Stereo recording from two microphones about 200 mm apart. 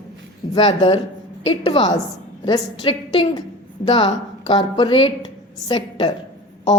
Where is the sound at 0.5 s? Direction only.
25° left (ahead or behind).